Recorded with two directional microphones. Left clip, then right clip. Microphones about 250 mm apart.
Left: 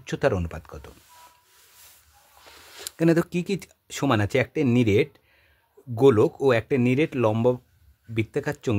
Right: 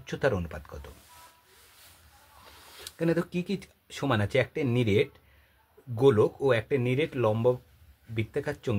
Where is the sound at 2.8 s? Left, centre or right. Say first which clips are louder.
Left 6 dB; left.